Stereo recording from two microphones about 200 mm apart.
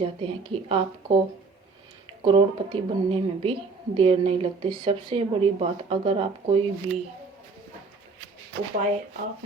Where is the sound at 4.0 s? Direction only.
30° right (ahead or behind).